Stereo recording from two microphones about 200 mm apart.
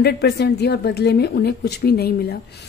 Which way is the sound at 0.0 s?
55° left (ahead or behind).